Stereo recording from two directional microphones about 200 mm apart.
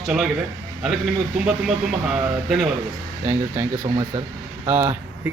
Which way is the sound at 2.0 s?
Centre (ahead or behind).